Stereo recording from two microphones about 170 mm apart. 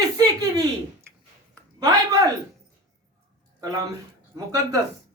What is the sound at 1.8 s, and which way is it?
Speech, 20° right (ahead or behind).